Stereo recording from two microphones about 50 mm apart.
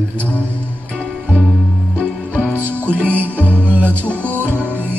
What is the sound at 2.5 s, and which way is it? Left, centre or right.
Music, right.